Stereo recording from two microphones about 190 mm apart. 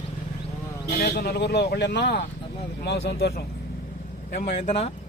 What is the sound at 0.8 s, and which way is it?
Speech, 60° left (ahead or behind).